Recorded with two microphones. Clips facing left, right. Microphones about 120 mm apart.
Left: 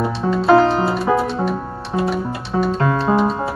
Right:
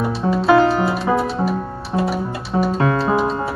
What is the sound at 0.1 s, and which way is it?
Music, 5° right (ahead or behind).